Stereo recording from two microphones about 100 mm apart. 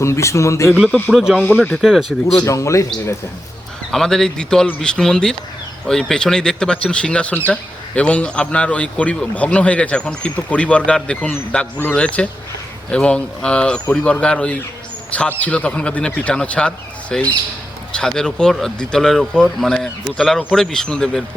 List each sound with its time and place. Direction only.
0.0 s speech: 30° left (ahead or behind)
0.9 s speech: 15° left (ahead or behind)
1.1 s speech: 5° right (ahead or behind)
1.5 s speech: 10° left (ahead or behind)
1.7 s speech: centre (ahead or behind)
2.3 s speech: 35° left (ahead or behind)
3.9 s speech: 5° left (ahead or behind)